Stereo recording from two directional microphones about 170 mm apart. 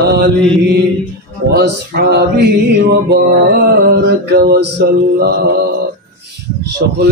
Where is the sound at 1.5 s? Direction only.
65° right (ahead or behind).